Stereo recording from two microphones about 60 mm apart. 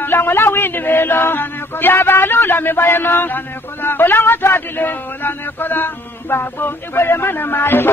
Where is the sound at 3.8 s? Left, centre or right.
Left.